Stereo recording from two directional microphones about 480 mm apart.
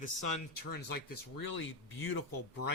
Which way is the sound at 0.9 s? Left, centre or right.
Left.